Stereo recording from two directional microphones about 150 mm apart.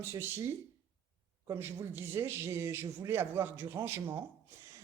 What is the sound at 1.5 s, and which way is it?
A man's voice, 15° right (ahead or behind).